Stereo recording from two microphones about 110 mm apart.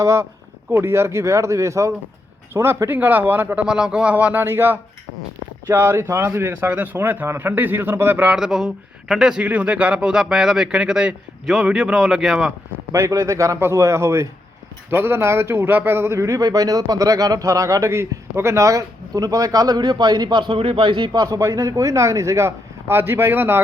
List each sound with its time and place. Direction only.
0.0 s speech: 25° right (ahead or behind); by 12.5 s centre (ahead or behind)
12.9 s speech: 30° right (ahead or behind)